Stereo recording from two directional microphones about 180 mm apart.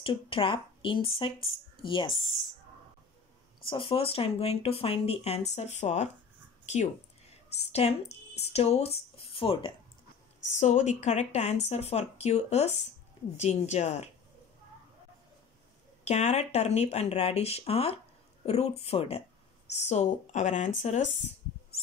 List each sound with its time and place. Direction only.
0.0 s speech: 30° left (ahead or behind)
3.6 s speech: 30° left (ahead or behind)
10.6 s speech: 40° left (ahead or behind)
16.0 s speech: 40° left (ahead or behind)